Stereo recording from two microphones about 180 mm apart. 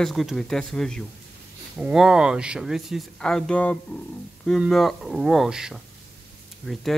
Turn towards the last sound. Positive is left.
turn(degrees=0)  # may be behind; listen again after turning